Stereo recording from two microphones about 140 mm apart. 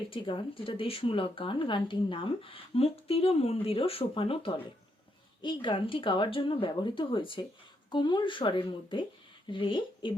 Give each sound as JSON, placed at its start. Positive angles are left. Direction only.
{"t": 0.1, "sound": "speech", "side_deg": 35}